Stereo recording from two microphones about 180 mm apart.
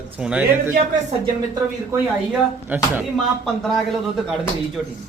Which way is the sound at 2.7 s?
10° right (ahead or behind).